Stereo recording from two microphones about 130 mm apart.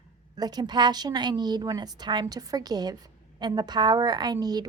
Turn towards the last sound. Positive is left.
turn(degrees=-30)  # may be behind; listen again after turning